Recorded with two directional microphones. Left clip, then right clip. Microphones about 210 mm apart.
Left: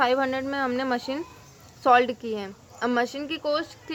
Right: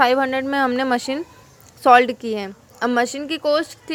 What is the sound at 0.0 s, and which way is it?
A woman's voice, 15° right (ahead or behind).